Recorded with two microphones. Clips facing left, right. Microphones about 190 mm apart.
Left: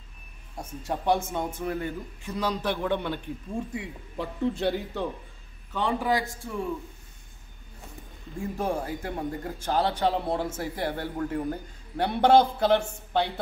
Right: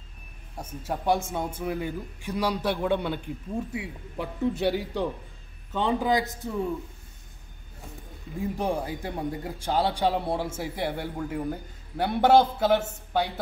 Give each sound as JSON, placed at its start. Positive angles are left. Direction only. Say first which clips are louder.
{"t": 0.8, "sound": "a man's voice", "louder": "even", "side_deg": -5}
{"t": 5.7, "sound": "a man's voice", "louder": "right 2 dB", "side_deg": -20}
{"t": 8.4, "sound": "a man's voice", "louder": "right 1 dB", "side_deg": -15}